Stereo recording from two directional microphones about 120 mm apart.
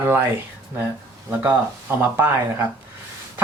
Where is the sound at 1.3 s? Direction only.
15° right (ahead or behind).